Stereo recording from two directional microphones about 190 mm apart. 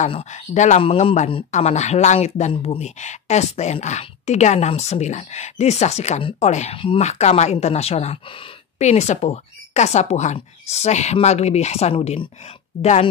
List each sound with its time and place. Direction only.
0.0 s speech: 35° left (ahead or behind)